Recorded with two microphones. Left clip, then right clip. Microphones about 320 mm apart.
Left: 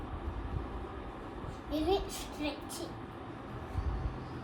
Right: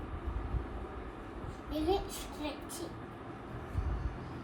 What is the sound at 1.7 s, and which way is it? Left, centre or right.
Speech, centre.